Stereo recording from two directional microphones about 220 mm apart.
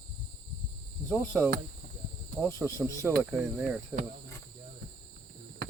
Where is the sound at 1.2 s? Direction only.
10° left (ahead or behind).